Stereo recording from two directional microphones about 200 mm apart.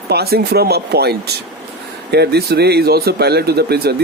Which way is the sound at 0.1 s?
50° right (ahead or behind).